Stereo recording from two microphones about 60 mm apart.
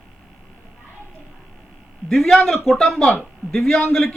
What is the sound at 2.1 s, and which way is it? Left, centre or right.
Speech, centre.